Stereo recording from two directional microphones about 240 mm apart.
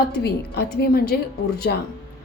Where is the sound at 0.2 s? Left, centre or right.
Left.